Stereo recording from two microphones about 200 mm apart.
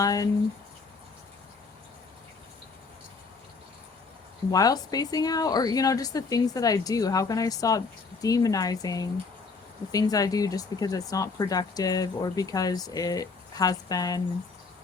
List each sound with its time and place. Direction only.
0.0 s speech: 20° left (ahead or behind)
4.5 s speech: 20° left (ahead or behind)